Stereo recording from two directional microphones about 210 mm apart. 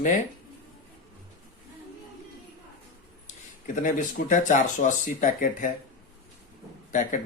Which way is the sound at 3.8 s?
40° left (ahead or behind).